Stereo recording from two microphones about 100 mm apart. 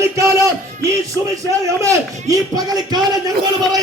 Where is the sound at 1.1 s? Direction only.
35° right (ahead or behind).